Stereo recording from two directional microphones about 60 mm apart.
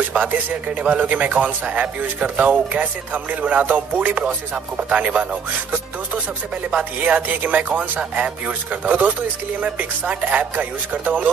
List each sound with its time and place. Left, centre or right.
0.1 s a man's voice: right
6.8 s a man's voice: right